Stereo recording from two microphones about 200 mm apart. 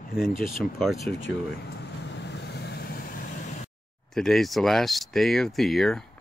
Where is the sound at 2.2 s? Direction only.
55° left (ahead or behind); by 3.6 s 40° left (ahead or behind).